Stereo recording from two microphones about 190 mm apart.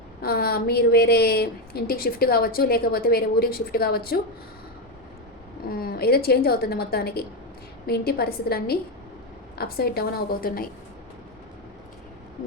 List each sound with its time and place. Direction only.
0.2 s a woman's voice: 55° left (ahead or behind)
5.7 s a woman's voice: 55° left (ahead or behind)